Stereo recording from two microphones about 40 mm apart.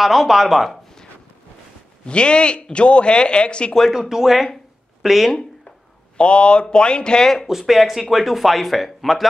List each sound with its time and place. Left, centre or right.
0.0 s speech: centre
2.0 s a man's voice: left
3.9 s speech: centre
6.1 s a man's voice: left
7.4 s speech: centre